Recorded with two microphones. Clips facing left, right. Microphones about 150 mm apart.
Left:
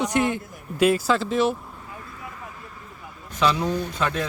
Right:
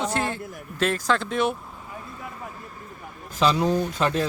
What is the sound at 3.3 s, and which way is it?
Speech, 30° right (ahead or behind).